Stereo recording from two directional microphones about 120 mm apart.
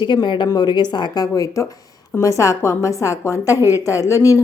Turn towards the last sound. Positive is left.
turn(degrees=25)  # may be behind; listen again after turning